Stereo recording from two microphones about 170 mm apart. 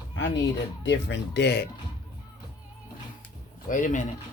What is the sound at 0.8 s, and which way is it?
Speech, 90° left.